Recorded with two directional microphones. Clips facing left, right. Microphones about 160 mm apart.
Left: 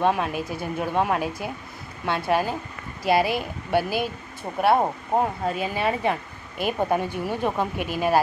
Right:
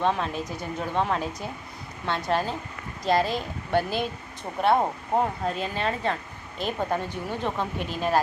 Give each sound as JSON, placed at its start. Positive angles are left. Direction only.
{"t": 0.0, "sound": "speech", "side_deg": 10}